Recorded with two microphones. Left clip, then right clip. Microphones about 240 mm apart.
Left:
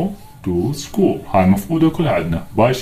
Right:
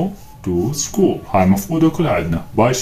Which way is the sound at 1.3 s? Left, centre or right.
Centre.